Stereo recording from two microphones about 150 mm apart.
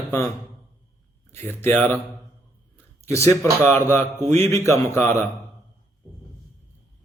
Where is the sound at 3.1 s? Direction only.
20° left (ahead or behind).